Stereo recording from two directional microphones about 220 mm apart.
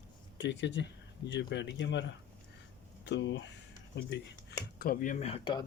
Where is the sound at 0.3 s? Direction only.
55° left (ahead or behind).